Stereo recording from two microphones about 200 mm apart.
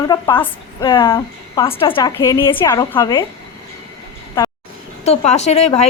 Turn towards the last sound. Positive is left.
turn(degrees=30)  # may be behind; listen again after turning